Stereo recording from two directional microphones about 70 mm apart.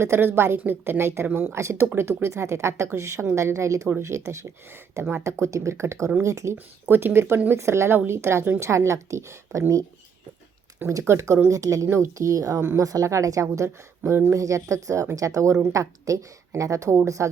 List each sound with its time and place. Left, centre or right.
0.0 s a woman's voice: right
6.8 s a woman's voice: right
11.0 s a woman's voice: right
11.4 s a woman's voice: right
14.0 s a woman's voice: right
14.4 s a woman's voice: right